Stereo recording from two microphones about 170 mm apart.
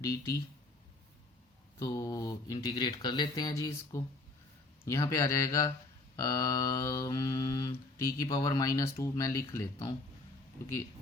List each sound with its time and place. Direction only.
0.0 s speech: 20° left (ahead or behind)
1.8 s speech: 20° left (ahead or behind)